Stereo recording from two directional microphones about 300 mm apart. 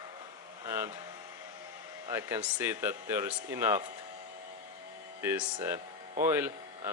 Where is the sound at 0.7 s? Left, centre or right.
Centre.